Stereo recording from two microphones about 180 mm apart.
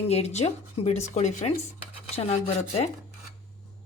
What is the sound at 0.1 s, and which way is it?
Speech, 35° left (ahead or behind).